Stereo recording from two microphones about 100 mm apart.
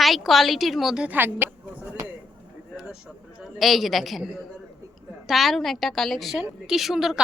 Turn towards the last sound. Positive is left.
turn(degrees=-5)  # may be behind; listen again after turning